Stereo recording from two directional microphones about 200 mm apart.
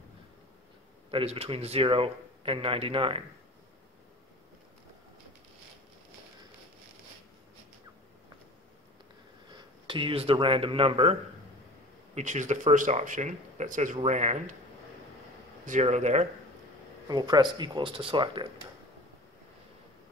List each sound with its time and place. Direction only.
1.1 s a man's voice: 30° right (ahead or behind)
9.5 s speech: 25° right (ahead or behind)
12.2 s speech: 35° right (ahead or behind)
15.6 s speech: 35° right (ahead or behind)
17.1 s a man's voice: 20° right (ahead or behind)